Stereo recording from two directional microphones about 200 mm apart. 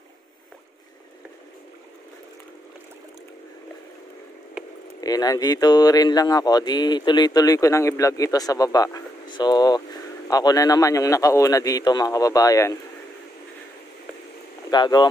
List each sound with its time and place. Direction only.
5.0 s speech: 20° left (ahead or behind)
14.7 s speech: 20° left (ahead or behind)